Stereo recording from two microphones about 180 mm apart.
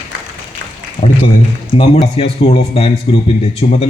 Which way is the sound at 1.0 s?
35° left (ahead or behind).